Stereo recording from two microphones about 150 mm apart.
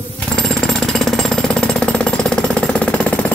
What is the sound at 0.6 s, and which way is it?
Jackhammer, 5° left (ahead or behind).